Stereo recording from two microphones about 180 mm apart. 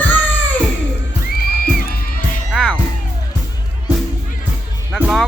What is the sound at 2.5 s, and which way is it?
Music, 5° right (ahead or behind).